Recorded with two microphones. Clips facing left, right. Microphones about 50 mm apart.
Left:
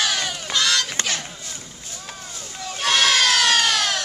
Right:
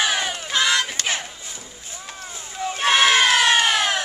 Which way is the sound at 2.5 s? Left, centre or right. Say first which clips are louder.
Right 3 dB; right.